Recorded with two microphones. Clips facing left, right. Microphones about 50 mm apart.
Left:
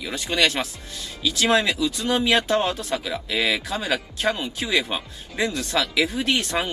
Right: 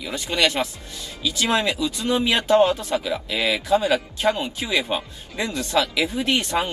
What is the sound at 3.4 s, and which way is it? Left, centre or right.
Speech, right.